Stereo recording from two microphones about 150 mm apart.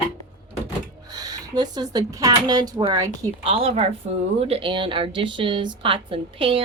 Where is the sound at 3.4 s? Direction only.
40° right (ahead or behind).